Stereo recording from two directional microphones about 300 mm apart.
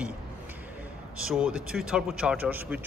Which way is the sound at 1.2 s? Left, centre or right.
Centre.